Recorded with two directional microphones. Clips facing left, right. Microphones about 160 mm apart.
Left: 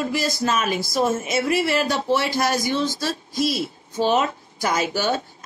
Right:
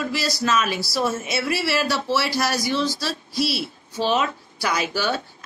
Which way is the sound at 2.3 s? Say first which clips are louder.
Left 1 dB; 50° left (ahead or behind).